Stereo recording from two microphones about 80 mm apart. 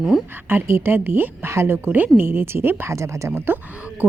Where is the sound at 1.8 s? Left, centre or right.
Right.